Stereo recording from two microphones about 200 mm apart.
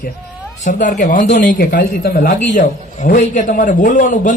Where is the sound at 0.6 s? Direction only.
40° left (ahead or behind).